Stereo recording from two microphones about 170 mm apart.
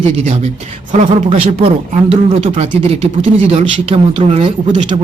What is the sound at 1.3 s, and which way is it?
Speech, 35° right (ahead or behind).